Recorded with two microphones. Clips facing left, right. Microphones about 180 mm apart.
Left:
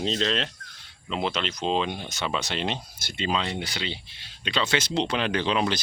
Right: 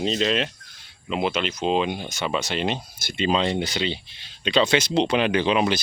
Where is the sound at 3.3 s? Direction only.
25° right (ahead or behind).